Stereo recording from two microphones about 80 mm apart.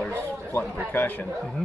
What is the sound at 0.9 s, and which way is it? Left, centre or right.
Speech, left.